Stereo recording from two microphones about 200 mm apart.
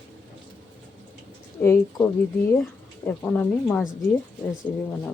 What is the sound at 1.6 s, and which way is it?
Speech, 10° left (ahead or behind).